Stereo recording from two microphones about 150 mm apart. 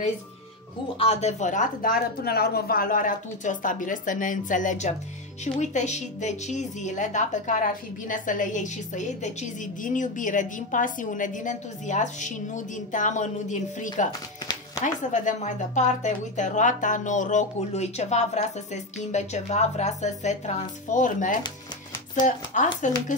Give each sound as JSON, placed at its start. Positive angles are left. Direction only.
{"t": 0.9, "sound": "a woman's voice", "side_deg": 45}
{"t": 15.0, "sound": "a woman's voice", "side_deg": 55}